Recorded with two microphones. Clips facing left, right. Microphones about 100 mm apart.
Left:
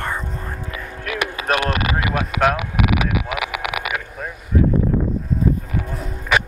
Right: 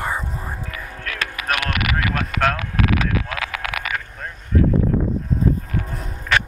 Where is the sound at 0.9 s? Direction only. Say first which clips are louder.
Left 5 dB; 15° left (ahead or behind).